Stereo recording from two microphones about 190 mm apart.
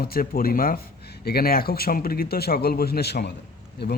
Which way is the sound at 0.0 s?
50° left (ahead or behind).